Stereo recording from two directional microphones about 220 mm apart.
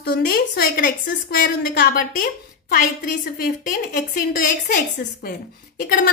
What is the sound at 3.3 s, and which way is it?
A woman's voice, 40° left (ahead or behind).